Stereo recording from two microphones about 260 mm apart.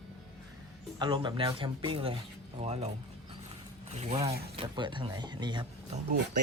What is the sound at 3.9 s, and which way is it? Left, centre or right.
Speech, right.